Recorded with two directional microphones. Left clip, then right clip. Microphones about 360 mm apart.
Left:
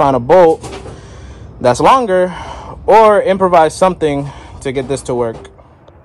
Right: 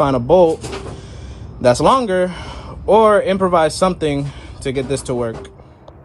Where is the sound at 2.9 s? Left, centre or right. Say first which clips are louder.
Left 4 dB; left.